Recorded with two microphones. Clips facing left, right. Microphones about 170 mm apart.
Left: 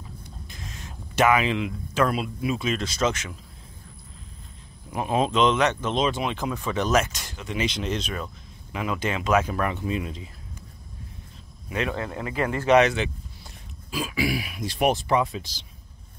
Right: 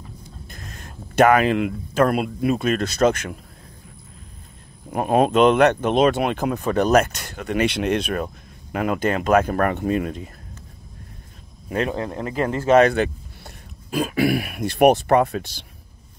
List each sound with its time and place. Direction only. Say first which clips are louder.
0.5 s speech: right 1 dB; 55° right (ahead or behind)
4.9 s speech: right 6 dB; 55° right (ahead or behind)
11.7 s speech: right 4 dB; 35° right (ahead or behind); by 15.6 s 60° right (ahead or behind)